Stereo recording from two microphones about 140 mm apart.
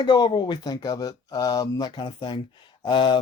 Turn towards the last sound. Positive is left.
turn(degrees=35)  # may be behind; listen again after turning